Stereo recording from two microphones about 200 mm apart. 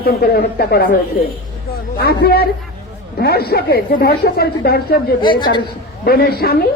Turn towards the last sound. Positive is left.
turn(degrees=50)  # may be behind; listen again after turning